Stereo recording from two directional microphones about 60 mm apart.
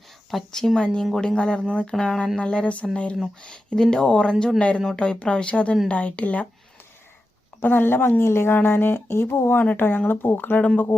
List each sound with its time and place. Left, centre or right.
0.3 s a woman's voice: centre; by 6.5 s left
7.6 s speech: left